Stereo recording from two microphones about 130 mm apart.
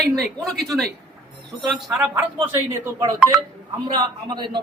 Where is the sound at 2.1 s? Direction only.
15° right (ahead or behind).